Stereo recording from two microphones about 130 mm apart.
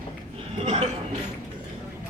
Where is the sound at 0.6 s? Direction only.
50° right (ahead or behind).